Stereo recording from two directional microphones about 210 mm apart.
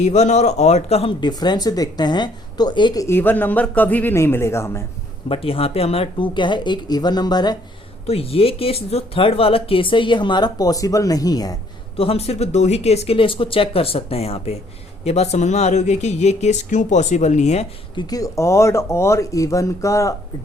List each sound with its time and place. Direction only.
0.0 s speech: 30° left (ahead or behind); by 4.8 s 15° left (ahead or behind)
5.3 s speech: 25° left (ahead or behind)
11.9 s speech: 30° left (ahead or behind)
18.0 s speech: 15° left (ahead or behind)